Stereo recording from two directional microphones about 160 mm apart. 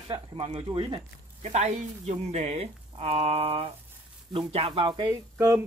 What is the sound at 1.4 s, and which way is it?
Speech, 45° right (ahead or behind).